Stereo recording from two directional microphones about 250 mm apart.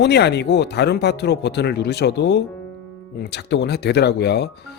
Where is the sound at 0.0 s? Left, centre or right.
Left.